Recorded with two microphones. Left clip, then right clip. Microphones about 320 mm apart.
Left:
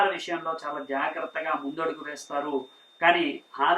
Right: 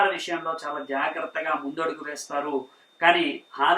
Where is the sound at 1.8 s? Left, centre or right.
Centre.